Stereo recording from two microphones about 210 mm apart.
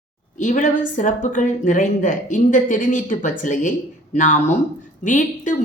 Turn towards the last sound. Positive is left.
turn(degrees=35)  # may be behind; listen again after turning